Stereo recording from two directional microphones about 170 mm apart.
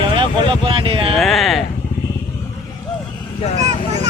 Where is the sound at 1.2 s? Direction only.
Centre (ahead or behind).